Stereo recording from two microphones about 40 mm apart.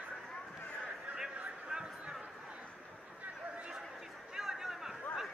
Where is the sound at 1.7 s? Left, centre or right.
Right.